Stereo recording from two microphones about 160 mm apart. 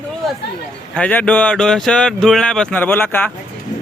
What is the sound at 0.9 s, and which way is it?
Speech, 10° left (ahead or behind).